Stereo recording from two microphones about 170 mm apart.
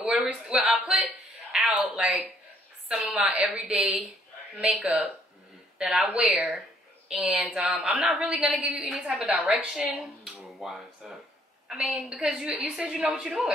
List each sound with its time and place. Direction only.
0.0 s a sound: 5° right (ahead or behind)
3.3 s speech: 5° right (ahead or behind)
8.3 s a woman's voice: 10° right (ahead or behind)